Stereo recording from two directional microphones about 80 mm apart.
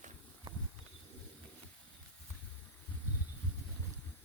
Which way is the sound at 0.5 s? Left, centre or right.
Right.